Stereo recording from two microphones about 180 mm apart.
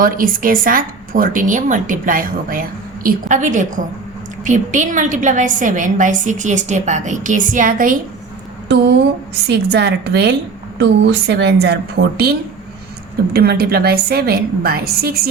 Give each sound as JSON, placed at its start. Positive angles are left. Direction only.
{"t": 0.0, "sound": "speech", "side_deg": -50}
{"t": 9.5, "sound": "a woman's voice", "side_deg": -65}
{"t": 13.3, "sound": "a woman's voice", "side_deg": -60}